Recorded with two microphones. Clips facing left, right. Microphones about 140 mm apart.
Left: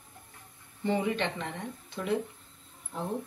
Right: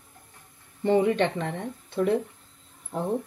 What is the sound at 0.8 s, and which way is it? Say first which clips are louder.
Speech: right 7 dB; 50° right (ahead or behind).